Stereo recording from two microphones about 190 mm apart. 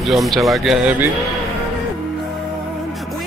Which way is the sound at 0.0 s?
Centre (ahead or behind).